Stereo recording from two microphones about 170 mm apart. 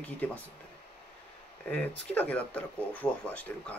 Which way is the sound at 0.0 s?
10° left (ahead or behind).